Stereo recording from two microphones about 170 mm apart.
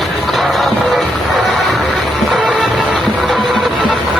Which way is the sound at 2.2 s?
Centre (ahead or behind).